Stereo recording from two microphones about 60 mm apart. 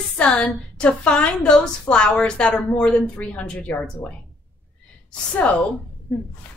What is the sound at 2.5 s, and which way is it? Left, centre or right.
A woman's voice, left.